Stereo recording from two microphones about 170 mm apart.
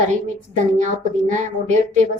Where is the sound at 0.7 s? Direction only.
45° right (ahead or behind).